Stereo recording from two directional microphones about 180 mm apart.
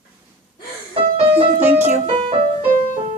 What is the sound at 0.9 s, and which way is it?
Music, 30° right (ahead or behind).